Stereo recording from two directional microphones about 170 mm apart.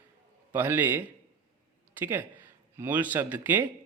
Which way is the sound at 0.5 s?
10° right (ahead or behind).